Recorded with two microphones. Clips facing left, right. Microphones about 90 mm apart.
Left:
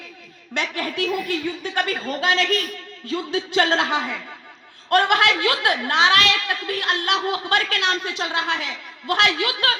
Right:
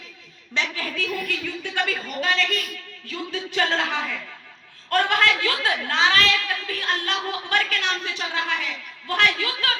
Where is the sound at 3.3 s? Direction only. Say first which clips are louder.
Left 4 dB; 90° left.